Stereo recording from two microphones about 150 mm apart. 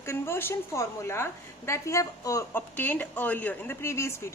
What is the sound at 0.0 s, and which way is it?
A woman's voice, 15° left (ahead or behind).